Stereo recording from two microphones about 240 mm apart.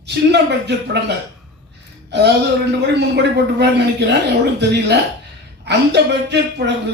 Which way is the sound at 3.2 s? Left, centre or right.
Right.